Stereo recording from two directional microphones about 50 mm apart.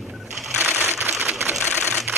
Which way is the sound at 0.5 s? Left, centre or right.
Right.